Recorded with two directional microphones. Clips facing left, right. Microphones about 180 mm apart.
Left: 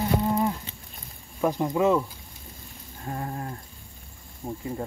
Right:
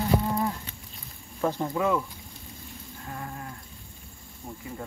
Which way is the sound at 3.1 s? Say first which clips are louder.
Left 6 dB; 35° left (ahead or behind).